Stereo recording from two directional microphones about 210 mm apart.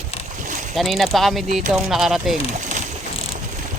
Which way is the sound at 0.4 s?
40° right (ahead or behind).